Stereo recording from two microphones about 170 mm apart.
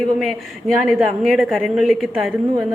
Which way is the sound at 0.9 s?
Centre (ahead or behind).